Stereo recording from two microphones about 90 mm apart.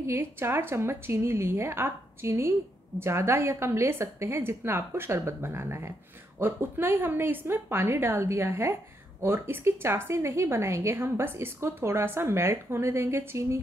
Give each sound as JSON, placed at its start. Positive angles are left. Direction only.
{"t": 0.0, "sound": "a woman's voice", "side_deg": -30}